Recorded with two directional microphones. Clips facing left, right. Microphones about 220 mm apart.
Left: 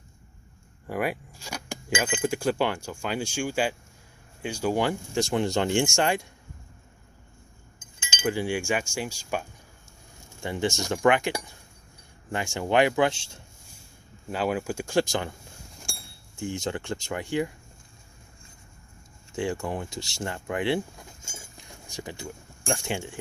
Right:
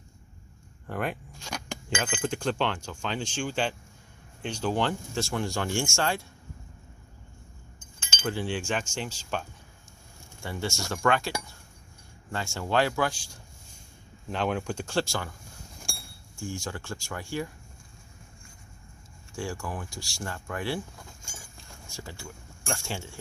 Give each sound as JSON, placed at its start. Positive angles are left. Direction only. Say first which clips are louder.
{"t": 0.9, "sound": "speech", "louder": "left 3 dB", "side_deg": 10}
{"t": 8.0, "sound": "speech", "louder": "left 4 dB", "side_deg": 15}
{"t": 14.3, "sound": "speech", "louder": "left 2 dB", "side_deg": 5}
{"t": 15.9, "sound": "a sound", "louder": "even", "side_deg": 0}
{"t": 16.3, "sound": "speech", "louder": "left 5 dB", "side_deg": 20}
{"t": 19.3, "sound": "speech", "louder": "left 5 dB", "side_deg": 20}